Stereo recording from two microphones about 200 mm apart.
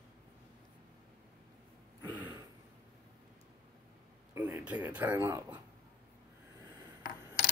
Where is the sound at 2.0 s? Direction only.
80° left.